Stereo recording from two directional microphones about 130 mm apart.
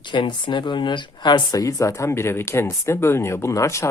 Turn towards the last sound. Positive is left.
turn(degrees=20)  # may be behind; listen again after turning